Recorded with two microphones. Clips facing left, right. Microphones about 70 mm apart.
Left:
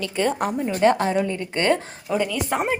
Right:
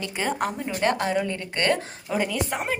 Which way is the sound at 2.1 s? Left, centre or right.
Centre.